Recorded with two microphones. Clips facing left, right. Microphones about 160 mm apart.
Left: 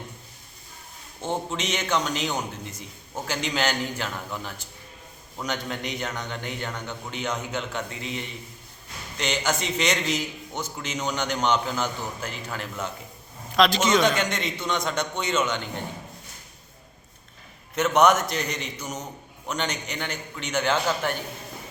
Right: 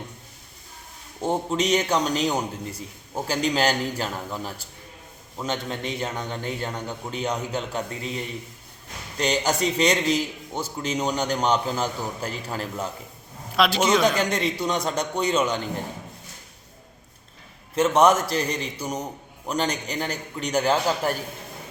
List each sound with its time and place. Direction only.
1.2 s a man's voice: 35° right (ahead or behind)
13.6 s a man's voice: 10° right (ahead or behind)
14.2 s a man's voice: 35° right (ahead or behind)
17.7 s a man's voice: 30° right (ahead or behind)